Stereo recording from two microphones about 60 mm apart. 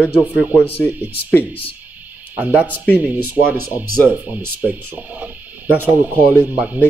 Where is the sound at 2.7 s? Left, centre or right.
Left.